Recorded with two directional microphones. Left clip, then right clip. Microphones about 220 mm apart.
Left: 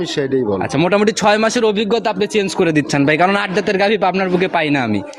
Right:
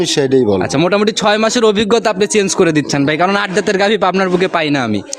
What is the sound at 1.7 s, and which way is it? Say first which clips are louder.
Speech: right 4 dB; 30° right (ahead or behind).